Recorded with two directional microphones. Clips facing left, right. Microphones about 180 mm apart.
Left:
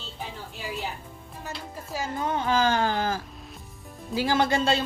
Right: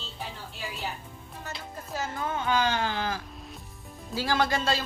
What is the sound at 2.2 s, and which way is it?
Speech, 35° left (ahead or behind).